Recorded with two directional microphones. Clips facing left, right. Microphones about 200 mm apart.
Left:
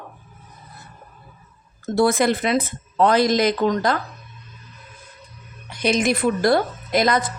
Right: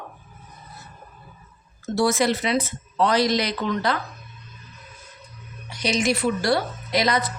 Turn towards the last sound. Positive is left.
turn(degrees=50)  # may be behind; listen again after turning